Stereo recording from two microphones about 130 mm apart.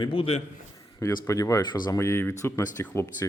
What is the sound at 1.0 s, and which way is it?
Speech, 25° left (ahead or behind).